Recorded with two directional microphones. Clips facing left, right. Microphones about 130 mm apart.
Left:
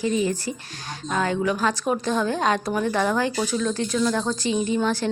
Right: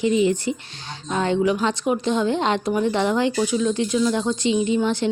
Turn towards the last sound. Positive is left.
turn(degrees=-20)  # may be behind; listen again after turning